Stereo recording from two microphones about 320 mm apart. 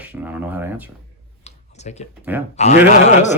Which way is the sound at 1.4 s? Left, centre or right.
Left.